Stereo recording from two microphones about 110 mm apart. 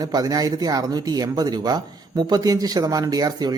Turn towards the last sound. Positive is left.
turn(degrees=-35)  # may be behind; listen again after turning